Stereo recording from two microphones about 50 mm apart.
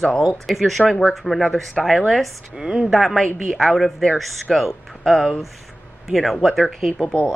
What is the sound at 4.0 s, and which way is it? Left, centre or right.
Speech, centre.